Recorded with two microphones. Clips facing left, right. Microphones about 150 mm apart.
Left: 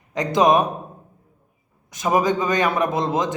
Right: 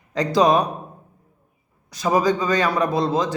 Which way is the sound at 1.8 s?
20° left (ahead or behind).